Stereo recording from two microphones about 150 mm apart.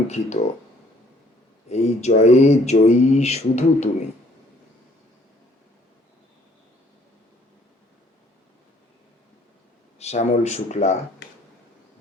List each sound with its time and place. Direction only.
0.1 s mantra: 45° left (ahead or behind)
1.7 s mantra: 45° left (ahead or behind)
10.0 s mantra: 45° left (ahead or behind)